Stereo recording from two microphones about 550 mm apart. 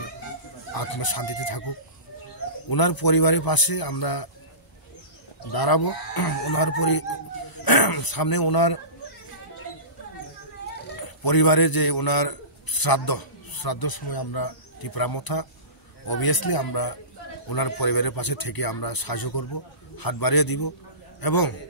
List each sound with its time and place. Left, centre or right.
0.7 s a man's voice: left
2.7 s a man's voice: left
5.5 s a man's voice: left
11.0 s a man's voice: left